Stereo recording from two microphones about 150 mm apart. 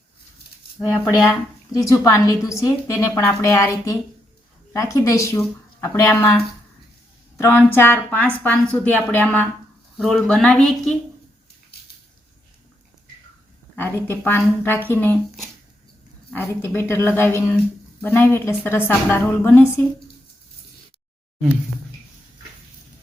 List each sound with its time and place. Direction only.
1.7 s a woman's voice: 20° left (ahead or behind); by 10.9 s 5° left (ahead or behind)
13.7 s a woman's voice: 15° left (ahead or behind)
16.3 s a woman's voice: 15° left (ahead or behind)